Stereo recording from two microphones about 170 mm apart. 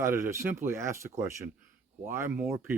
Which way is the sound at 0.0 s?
15° right (ahead or behind).